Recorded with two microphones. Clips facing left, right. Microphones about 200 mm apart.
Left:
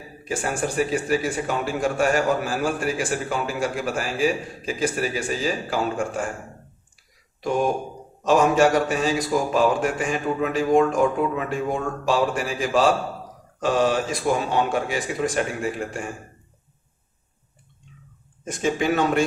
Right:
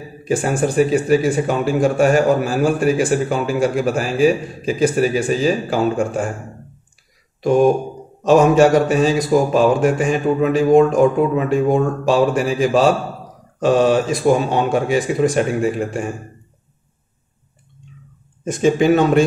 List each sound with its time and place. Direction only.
0.3 s a man's voice: 20° right (ahead or behind)
8.3 s a man's voice: 20° right (ahead or behind)
18.4 s a man's voice: 20° right (ahead or behind)